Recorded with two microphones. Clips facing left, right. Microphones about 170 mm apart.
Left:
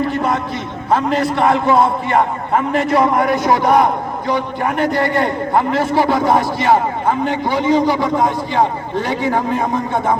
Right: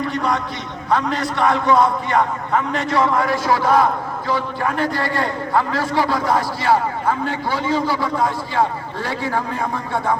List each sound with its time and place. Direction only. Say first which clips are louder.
0.9 s a man's voice: left 4 dB; 25° left (ahead or behind)